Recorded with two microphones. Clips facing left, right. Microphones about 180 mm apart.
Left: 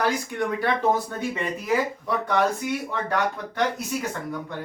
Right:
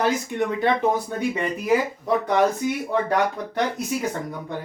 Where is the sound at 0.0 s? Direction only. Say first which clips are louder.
Right 2 dB; 20° right (ahead or behind).